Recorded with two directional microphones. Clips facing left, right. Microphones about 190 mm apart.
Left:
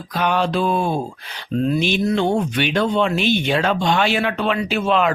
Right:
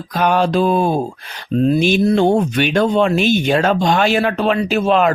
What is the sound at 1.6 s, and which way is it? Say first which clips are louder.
Speech: right 5 dB; 30° right (ahead or behind).